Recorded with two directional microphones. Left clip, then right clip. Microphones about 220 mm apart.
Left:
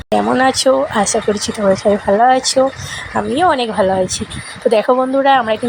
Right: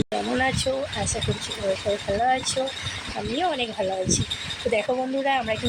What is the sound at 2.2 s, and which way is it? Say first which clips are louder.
Speech: left 11 dB; 25° left (ahead or behind).